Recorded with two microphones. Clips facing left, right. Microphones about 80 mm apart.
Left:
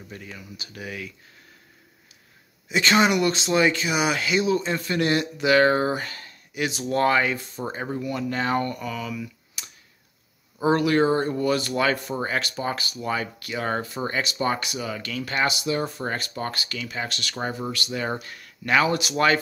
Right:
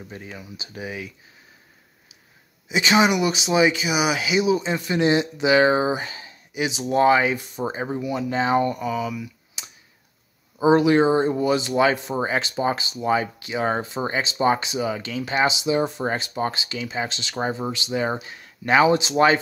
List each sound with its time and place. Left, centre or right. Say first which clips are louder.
0.1 s speech: left 1 dB; right
2.7 s speech: right 1 dB; centre
9.6 s a sound: right 1 dB; centre
10.6 s speech: right 4 dB; centre